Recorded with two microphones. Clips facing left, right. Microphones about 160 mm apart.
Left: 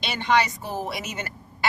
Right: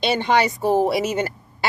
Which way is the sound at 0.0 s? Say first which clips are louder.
Right 4 dB; 30° right (ahead or behind).